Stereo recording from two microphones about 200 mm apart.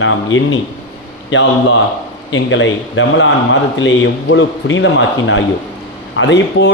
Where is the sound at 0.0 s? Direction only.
75° left (ahead or behind).